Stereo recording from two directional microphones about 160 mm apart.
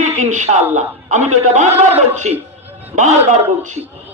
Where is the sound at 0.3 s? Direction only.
50° right (ahead or behind).